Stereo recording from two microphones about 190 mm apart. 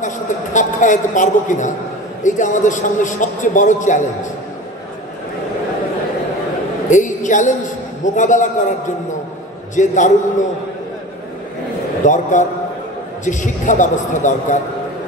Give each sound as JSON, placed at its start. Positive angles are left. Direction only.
{"t": 0.0, "sound": "a man's voice", "side_deg": 40}
{"t": 6.9, "sound": "a woman's voice", "side_deg": 40}
{"t": 12.0, "sound": "a man's voice", "side_deg": 40}